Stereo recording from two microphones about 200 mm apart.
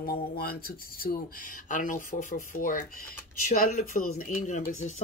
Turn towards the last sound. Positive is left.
turn(degrees=35)  # may be behind; listen again after turning